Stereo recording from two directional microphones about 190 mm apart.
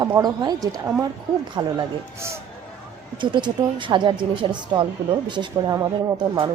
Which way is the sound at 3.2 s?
25° right (ahead or behind).